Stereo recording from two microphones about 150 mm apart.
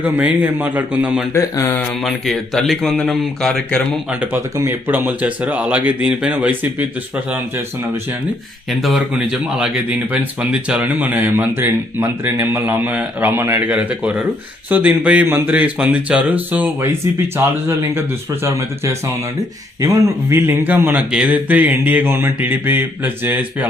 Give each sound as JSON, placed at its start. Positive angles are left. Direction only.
{"t": 0.0, "sound": "speech", "side_deg": -10}
{"t": 1.3, "sound": "speech", "side_deg": 20}
{"t": 2.0, "sound": "speech", "side_deg": 0}
{"t": 4.1, "sound": "speech", "side_deg": -10}
{"t": 8.8, "sound": "speech", "side_deg": -5}